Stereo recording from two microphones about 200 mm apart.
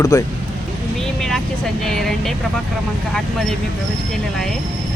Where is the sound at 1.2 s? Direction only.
Centre (ahead or behind).